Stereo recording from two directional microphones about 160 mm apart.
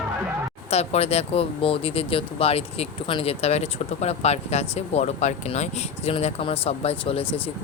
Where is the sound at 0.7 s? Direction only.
40° left (ahead or behind).